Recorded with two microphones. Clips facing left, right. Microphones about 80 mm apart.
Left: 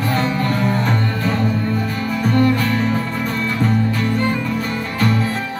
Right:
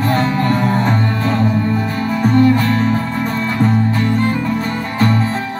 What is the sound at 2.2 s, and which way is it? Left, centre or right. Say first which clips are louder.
Music: right 4 dB; right.